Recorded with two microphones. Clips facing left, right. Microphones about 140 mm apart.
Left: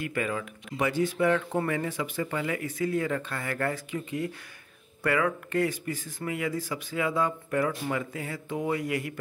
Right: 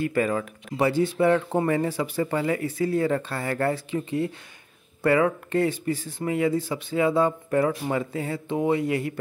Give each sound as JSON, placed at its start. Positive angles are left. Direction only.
{"t": 0.0, "sound": "speech", "side_deg": -35}